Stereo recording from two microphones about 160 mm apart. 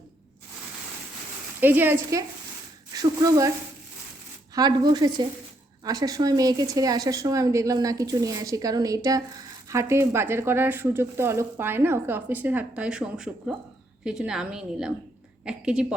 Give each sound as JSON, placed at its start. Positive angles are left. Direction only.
{"t": 1.6, "sound": "speech", "side_deg": -10}
{"t": 4.5, "sound": "a woman's voice", "side_deg": -25}